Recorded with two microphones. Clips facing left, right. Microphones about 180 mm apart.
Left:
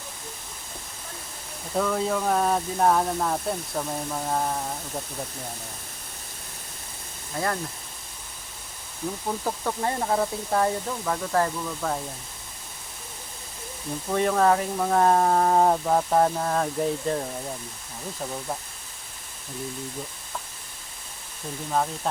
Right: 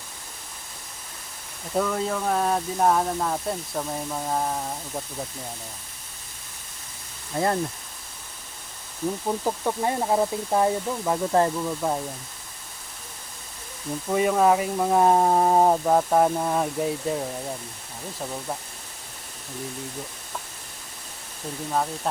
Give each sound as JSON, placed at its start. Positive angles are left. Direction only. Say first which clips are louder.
{"t": 1.7, "sound": "speech", "louder": "even", "side_deg": 0}
{"t": 7.3, "sound": "speech", "louder": "right 4 dB", "side_deg": -25}
{"t": 9.4, "sound": "speech", "louder": "right 1 dB", "side_deg": -15}
{"t": 14.1, "sound": "speech", "louder": "right 1 dB", "side_deg": -10}
{"t": 21.7, "sound": "speech", "louder": "even", "side_deg": 0}